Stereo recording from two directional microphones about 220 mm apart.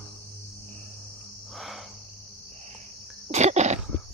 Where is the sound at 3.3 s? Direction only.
30° right (ahead or behind).